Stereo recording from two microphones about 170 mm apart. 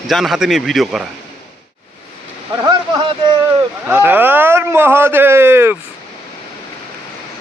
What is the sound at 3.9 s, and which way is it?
Speech, 10° right (ahead or behind).